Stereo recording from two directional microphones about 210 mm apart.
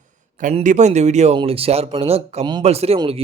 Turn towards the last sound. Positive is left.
turn(degrees=-25)  # may be behind; listen again after turning